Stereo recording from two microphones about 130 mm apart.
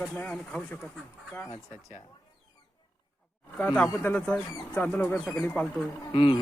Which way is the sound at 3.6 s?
10° left (ahead or behind).